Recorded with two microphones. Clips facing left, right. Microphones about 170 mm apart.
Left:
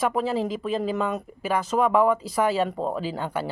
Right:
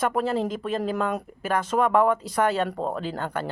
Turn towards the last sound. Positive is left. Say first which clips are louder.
# left 1 dB
turn(degrees=10)  # may be behind; listen again after turning